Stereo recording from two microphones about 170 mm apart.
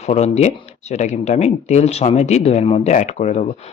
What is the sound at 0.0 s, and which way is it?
Speech, 40° left (ahead or behind).